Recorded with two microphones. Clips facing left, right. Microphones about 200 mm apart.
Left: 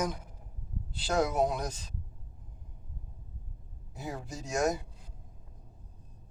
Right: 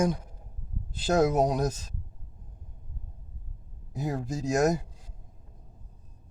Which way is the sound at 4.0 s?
40° right (ahead or behind).